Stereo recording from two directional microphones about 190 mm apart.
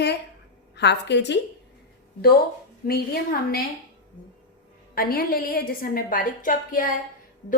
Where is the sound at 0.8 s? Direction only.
65° left (ahead or behind).